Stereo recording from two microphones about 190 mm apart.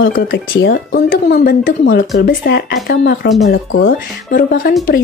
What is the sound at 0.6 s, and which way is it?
Speech, 60° left (ahead or behind).